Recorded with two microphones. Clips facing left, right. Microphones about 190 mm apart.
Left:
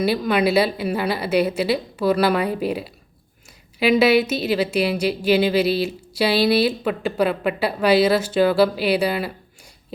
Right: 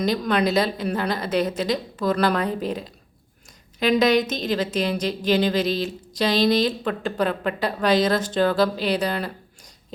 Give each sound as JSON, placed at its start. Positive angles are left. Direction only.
{"t": 0.0, "sound": "a woman's voice", "side_deg": 5}